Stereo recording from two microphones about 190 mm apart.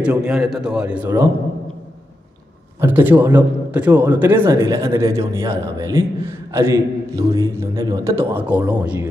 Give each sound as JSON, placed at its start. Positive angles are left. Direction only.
{"t": 0.0, "sound": "a man's voice", "side_deg": -5}
{"t": 2.8, "sound": "a man's voice", "side_deg": -10}